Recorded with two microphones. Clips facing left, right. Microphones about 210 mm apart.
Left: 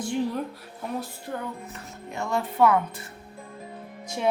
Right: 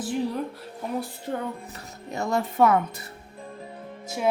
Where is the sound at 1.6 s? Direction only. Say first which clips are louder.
Even; 35° right (ahead or behind).